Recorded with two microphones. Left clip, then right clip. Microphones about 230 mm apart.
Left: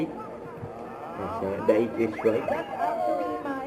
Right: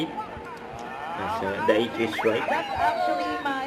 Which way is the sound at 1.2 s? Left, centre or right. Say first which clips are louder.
Right 3 dB; right.